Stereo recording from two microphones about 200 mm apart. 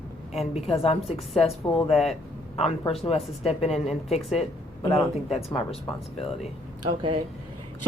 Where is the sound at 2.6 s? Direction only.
30° left (ahead or behind).